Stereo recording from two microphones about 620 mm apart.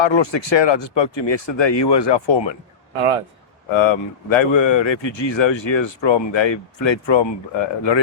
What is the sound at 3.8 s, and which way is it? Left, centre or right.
Speech, left.